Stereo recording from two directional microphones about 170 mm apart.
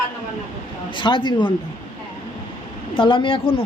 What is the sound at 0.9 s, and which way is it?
Speech, 30° left (ahead or behind).